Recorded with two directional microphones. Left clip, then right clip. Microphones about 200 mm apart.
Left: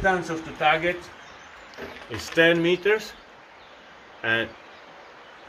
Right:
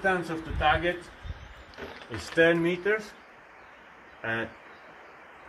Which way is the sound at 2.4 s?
55° left (ahead or behind).